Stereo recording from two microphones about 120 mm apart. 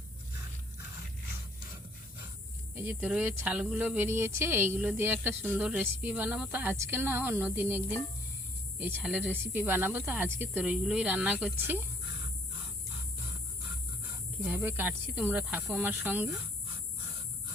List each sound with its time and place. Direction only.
2.7 s speech: 15° right (ahead or behind)
8.8 s speech: 10° right (ahead or behind)
14.5 s speech: 15° right (ahead or behind)